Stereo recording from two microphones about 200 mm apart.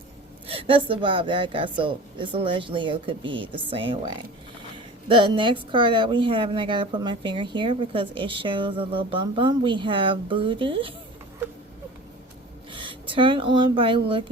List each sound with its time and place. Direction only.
0.4 s a woman's voice: 25° right (ahead or behind)
12.7 s speech: 25° right (ahead or behind)